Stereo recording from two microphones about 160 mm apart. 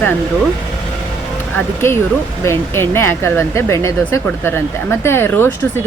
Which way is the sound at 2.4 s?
15° left (ahead or behind).